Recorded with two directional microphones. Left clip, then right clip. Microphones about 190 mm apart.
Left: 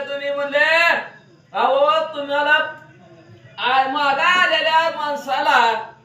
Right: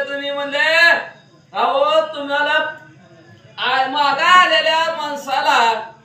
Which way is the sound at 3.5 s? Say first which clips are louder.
Right 1 dB; 20° right (ahead or behind).